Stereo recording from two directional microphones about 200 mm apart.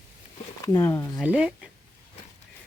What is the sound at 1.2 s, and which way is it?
Speech, 5° right (ahead or behind).